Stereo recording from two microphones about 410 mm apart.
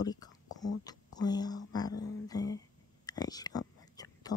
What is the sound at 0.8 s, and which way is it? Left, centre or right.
Speech, centre.